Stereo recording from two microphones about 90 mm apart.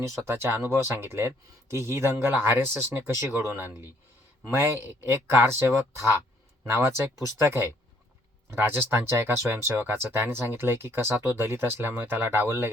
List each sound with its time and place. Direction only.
0.0 s speech: 25° right (ahead or behind)